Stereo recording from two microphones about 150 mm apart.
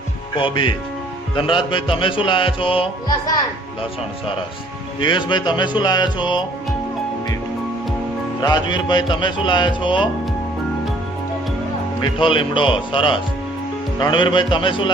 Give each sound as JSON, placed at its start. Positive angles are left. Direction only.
{"t": 0.3, "sound": "speech", "side_deg": 35}
{"t": 4.9, "sound": "speech", "side_deg": 30}
{"t": 8.4, "sound": "speech", "side_deg": 30}
{"t": 11.9, "sound": "speech", "side_deg": 35}